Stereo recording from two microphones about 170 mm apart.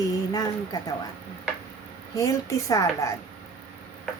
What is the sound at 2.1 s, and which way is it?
A woman's voice, 20° left (ahead or behind).